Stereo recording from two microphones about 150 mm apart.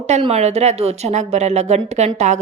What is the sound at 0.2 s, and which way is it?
A woman's voice, 45° right (ahead or behind).